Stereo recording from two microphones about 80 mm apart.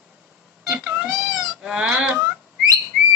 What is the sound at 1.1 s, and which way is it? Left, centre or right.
Cat, right.